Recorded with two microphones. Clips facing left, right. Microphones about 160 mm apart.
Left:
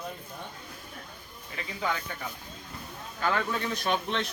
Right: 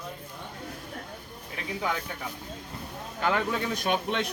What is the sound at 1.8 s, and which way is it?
Speech, 10° right (ahead or behind).